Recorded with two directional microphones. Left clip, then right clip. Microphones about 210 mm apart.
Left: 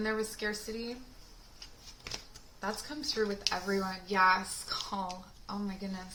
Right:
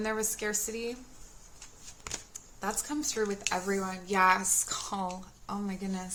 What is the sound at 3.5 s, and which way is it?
Speech, 30° right (ahead or behind).